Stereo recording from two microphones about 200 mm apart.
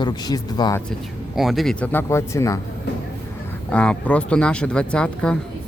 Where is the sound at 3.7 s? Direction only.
5° left (ahead or behind).